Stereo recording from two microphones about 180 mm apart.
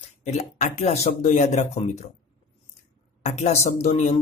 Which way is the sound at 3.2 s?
40° left (ahead or behind).